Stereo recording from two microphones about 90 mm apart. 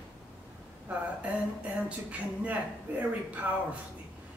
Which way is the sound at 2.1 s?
15° right (ahead or behind).